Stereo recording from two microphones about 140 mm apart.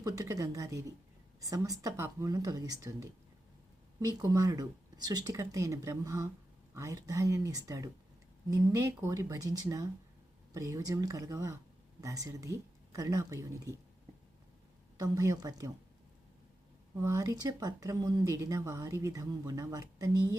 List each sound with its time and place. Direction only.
0.0 s speech: 25° right (ahead or behind)
14.9 s speech: 25° right (ahead or behind)
17.0 s speech: 20° right (ahead or behind)